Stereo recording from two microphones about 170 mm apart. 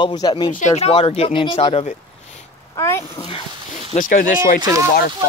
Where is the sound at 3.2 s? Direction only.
35° left (ahead or behind).